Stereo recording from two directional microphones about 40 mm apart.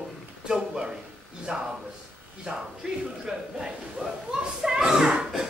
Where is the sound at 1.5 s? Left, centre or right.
Right.